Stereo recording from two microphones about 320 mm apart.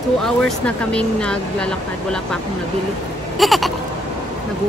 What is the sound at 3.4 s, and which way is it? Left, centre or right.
Bleat, centre.